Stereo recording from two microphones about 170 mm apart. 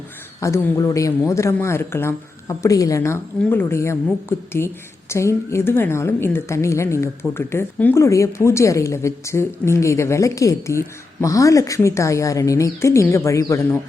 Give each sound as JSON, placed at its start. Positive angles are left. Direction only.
{"t": 0.3, "sound": "speech", "side_deg": 15}